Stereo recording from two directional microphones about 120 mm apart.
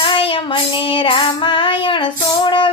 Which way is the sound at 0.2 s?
50° left (ahead or behind).